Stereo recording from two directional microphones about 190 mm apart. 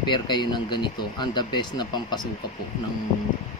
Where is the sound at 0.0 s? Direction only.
25° left (ahead or behind).